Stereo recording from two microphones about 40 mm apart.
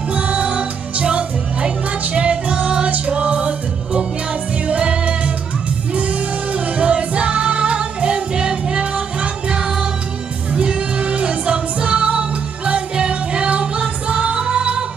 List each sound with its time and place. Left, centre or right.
0.1 s music: right